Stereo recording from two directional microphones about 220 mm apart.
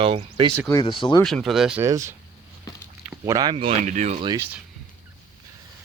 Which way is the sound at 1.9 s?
15° right (ahead or behind).